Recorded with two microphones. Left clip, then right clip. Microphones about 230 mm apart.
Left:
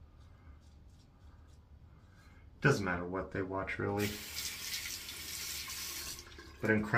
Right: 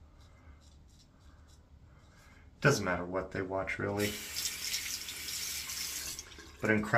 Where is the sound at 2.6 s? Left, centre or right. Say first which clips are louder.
Right 2 dB; centre.